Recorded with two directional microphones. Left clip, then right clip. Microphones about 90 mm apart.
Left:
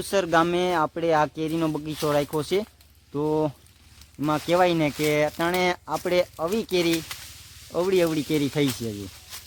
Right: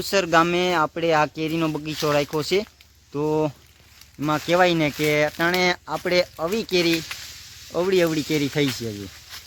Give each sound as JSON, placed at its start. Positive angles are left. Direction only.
{"t": 0.0, "sound": "speech", "side_deg": 10}
{"t": 6.3, "sound": "speech", "side_deg": -5}
{"t": 9.3, "sound": "a sound", "side_deg": 15}